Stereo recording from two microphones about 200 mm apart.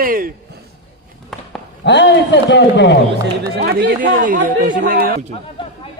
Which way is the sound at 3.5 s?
60° right (ahead or behind).